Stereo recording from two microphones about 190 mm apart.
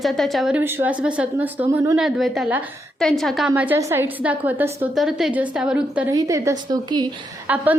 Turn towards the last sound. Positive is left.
turn(degrees=-10)  # may be behind; listen again after turning